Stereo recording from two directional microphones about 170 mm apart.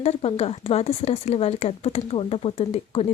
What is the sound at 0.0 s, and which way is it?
Speech, 35° left (ahead or behind).